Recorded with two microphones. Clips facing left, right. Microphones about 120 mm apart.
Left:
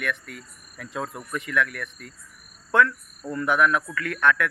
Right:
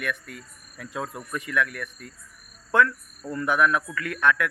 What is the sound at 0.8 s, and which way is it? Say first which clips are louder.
Speech: left 1 dB; 25° left (ahead or behind).